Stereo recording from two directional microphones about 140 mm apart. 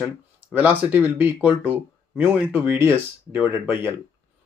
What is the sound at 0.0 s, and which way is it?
Speech, 10° right (ahead or behind).